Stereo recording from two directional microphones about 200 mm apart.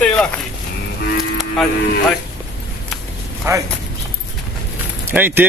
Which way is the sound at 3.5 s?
15° right (ahead or behind).